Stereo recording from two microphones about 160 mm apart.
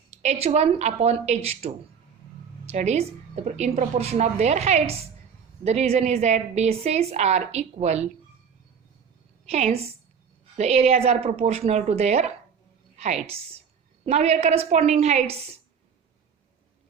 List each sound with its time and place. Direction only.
0.1 s a woman's voice: 40° right (ahead or behind)
9.5 s a woman's voice: 40° right (ahead or behind)